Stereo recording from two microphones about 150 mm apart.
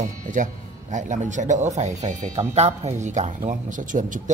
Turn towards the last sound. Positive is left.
turn(degrees=-60)  # may be behind; listen again after turning